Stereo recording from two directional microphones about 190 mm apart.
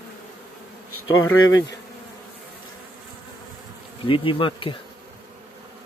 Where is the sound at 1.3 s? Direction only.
90° left.